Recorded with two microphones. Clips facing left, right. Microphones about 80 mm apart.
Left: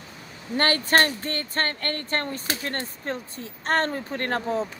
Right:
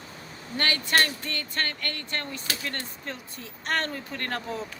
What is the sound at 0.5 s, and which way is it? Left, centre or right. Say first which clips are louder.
Speech: left 5 dB; left.